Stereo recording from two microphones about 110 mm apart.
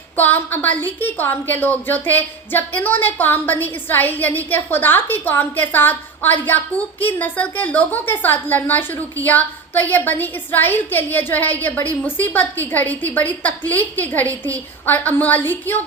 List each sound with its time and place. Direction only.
0.2 s a woman's voice: 15° left (ahead or behind)